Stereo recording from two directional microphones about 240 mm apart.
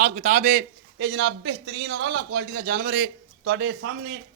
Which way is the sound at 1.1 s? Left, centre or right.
Right.